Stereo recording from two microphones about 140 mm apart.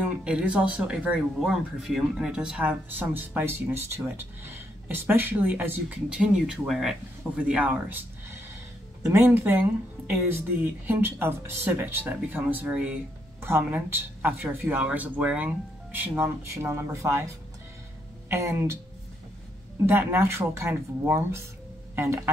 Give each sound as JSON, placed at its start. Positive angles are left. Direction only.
{"t": 0.0, "sound": "speech", "side_deg": -10}
{"t": 18.3, "sound": "speech", "side_deg": -20}
{"t": 19.9, "sound": "speech", "side_deg": -15}